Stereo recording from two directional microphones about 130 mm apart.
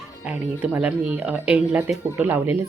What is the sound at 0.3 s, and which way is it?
Speech, 10° right (ahead or behind).